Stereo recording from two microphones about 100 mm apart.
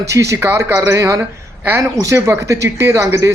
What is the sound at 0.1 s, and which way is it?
Speech, 30° right (ahead or behind).